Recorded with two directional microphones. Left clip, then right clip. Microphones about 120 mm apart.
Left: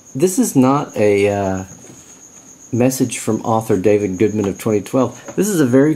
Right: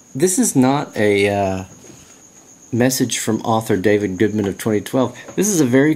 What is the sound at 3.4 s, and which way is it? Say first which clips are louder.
Speech: left 2 dB; 20° right (ahead or behind).